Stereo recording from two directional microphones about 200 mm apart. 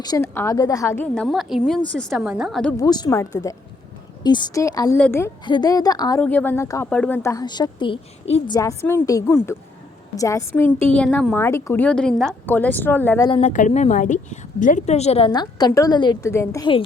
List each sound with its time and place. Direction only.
0.0 s a woman's voice: 15° left (ahead or behind)
2.7 s a woman's voice: 20° left (ahead or behind)
5.5 s speech: 20° left (ahead or behind)
13.2 s a woman's voice: 25° left (ahead or behind)
13.5 s a woman's voice: 40° left (ahead or behind); by 16.8 s 20° left (ahead or behind)